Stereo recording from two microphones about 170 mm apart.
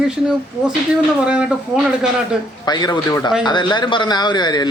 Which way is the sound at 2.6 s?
25° left (ahead or behind).